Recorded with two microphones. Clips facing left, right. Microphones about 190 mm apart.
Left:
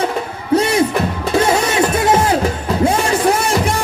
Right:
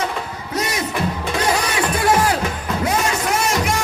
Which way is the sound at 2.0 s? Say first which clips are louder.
Even; 25° left (ahead or behind).